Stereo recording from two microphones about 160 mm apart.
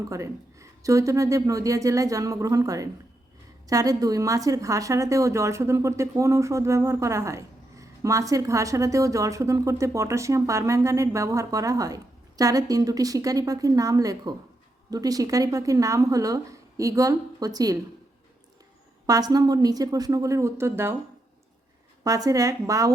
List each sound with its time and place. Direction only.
0.0 s a woman's voice: 20° right (ahead or behind)
19.0 s a woman's voice: 25° right (ahead or behind)
22.0 s a woman's voice: 20° right (ahead or behind)